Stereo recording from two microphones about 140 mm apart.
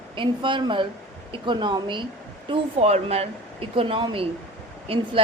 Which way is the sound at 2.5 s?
45° right (ahead or behind).